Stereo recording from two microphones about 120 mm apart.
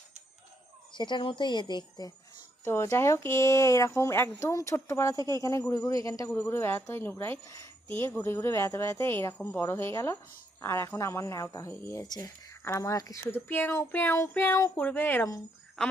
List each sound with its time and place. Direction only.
0.9 s speech: 40° left (ahead or behind)
2.6 s speech: 25° left (ahead or behind)
5.1 s speech: 35° right (ahead or behind)
5.4 s speech: 25° left (ahead or behind)
15.8 s a woman's voice: 5° left (ahead or behind)